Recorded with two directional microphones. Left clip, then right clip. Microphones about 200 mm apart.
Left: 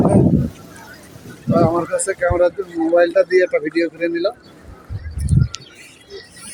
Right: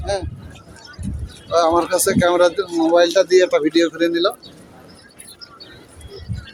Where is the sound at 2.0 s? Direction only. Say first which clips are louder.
Right 2 dB; 5° right (ahead or behind).